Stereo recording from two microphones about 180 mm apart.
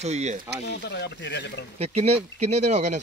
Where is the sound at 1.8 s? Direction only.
35° right (ahead or behind).